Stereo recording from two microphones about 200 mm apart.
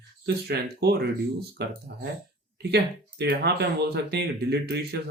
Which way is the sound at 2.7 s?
55° right (ahead or behind).